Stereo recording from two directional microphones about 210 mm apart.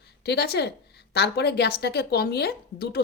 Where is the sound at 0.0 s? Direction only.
50° left (ahead or behind).